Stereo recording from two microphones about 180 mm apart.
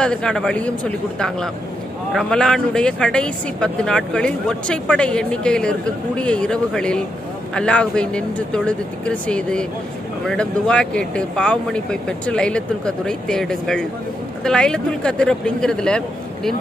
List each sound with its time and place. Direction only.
0.0 s speech: 5° left (ahead or behind)